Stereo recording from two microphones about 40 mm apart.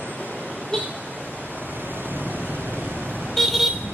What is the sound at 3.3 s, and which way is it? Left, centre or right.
Vehicle, centre.